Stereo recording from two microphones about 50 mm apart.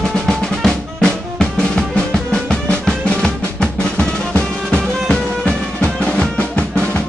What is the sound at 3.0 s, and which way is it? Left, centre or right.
Music, centre.